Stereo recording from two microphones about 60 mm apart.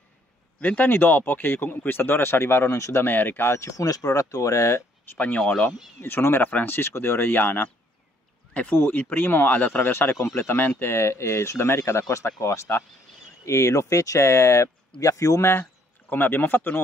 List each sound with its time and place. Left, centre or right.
0.6 s speech: left
3.1 s speech: left
3.5 s speech: left
8.7 s speech: left
15.0 s speech: left
16.1 s speech: left